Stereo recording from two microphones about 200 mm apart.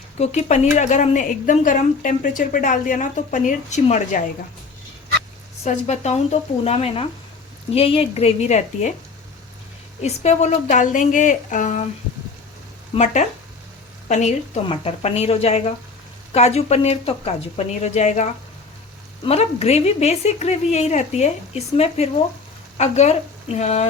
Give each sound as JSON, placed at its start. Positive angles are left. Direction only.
{"t": 0.2, "sound": "a woman's voice", "side_deg": 35}
{"t": 5.6, "sound": "a woman's voice", "side_deg": 35}
{"t": 10.0, "sound": "a woman's voice", "side_deg": 35}
{"t": 14.1, "sound": "a woman's voice", "side_deg": 35}